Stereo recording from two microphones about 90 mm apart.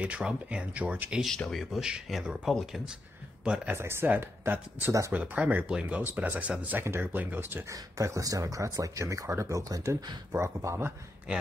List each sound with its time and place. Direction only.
0.0 s speech: 10° right (ahead or behind)
1.2 s speech: 5° left (ahead or behind); by 3.7 s 10° right (ahead or behind)
3.7 s speech: 25° right (ahead or behind)
7.7 s speech: 40° right (ahead or behind)
10.3 s speech: 30° right (ahead or behind)